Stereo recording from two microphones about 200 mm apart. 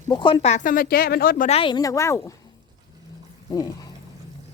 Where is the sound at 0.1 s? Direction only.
20° left (ahead or behind); by 1.5 s 45° left (ahead or behind).